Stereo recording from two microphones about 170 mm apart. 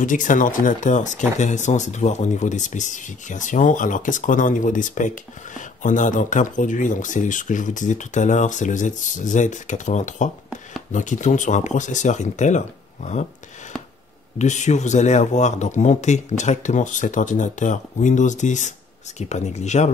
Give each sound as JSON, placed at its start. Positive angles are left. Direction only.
{"t": 0.0, "sound": "speech", "side_deg": 50}
{"t": 14.4, "sound": "speech", "side_deg": 45}